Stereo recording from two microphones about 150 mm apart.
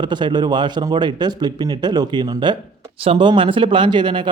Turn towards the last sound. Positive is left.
turn(degrees=-30)  # may be behind; listen again after turning